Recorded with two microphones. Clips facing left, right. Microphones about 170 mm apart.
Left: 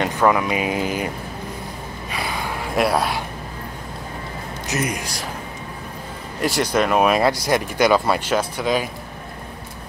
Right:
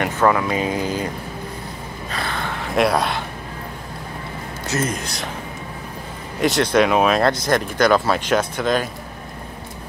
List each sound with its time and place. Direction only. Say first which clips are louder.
0.0 s speech: even; 15° left (ahead or behind)
2.0 s a sound: even; 10° left (ahead or behind)
4.6 s speech: right 1 dB; 15° left (ahead or behind)
6.4 s speech: right 3 dB; 10° left (ahead or behind)